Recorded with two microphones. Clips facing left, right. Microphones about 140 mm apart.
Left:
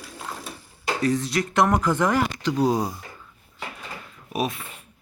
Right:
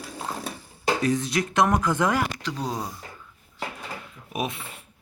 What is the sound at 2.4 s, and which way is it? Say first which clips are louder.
Speech: left 9 dB; 5° left (ahead or behind).